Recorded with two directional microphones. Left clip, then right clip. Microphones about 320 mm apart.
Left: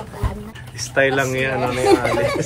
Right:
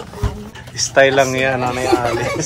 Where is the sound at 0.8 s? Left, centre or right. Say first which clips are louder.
Right 6 dB; centre.